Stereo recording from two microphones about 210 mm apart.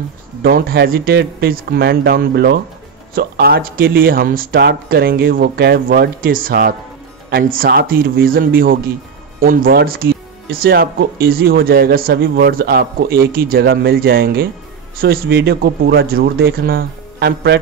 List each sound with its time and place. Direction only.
0.4 s a man's voice: 45° right (ahead or behind)